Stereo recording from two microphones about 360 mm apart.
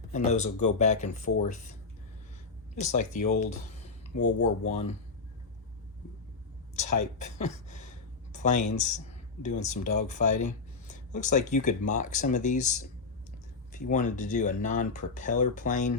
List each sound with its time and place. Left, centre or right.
0.1 s speech: centre
2.7 s speech: centre
7.3 s speech: centre
13.9 s speech: left